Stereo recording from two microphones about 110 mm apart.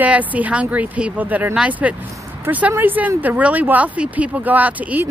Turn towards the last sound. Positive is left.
turn(degrees=-15)  # may be behind; listen again after turning